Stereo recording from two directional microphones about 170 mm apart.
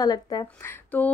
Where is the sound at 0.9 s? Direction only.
10° left (ahead or behind).